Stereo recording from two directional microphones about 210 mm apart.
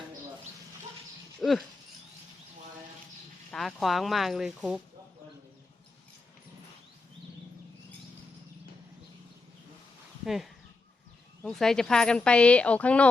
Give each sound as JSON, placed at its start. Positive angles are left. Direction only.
{"t": 1.4, "sound": "a sound", "side_deg": 0}
{"t": 3.5, "sound": "speech", "side_deg": 0}
{"t": 10.2, "sound": "speech", "side_deg": 0}